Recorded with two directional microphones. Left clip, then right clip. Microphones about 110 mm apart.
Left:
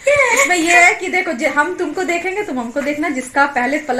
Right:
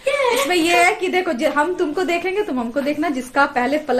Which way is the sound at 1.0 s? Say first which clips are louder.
Left 2 dB; 10° right (ahead or behind).